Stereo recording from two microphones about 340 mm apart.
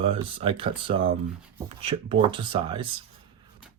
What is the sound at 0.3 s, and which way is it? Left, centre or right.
Speech, centre.